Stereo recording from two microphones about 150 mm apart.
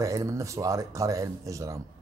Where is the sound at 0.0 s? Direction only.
20° right (ahead or behind).